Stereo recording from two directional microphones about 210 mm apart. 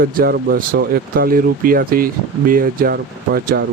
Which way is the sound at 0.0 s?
45° right (ahead or behind).